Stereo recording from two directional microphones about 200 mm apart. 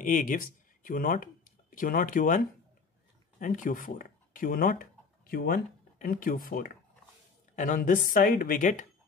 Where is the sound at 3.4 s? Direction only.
40° left (ahead or behind).